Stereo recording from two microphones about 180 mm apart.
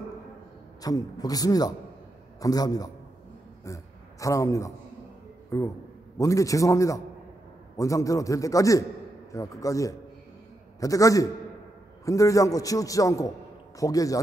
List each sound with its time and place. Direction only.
0.8 s a man's voice: 20° left (ahead or behind)